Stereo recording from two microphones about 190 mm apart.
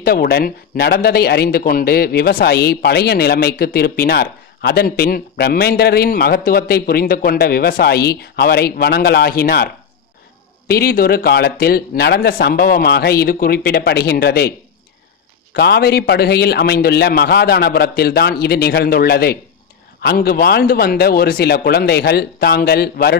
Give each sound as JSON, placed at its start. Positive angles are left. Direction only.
{"t": 0.0, "sound": "speech", "side_deg": 55}
{"t": 10.7, "sound": "speech", "side_deg": 55}
{"t": 15.5, "sound": "speech", "side_deg": 60}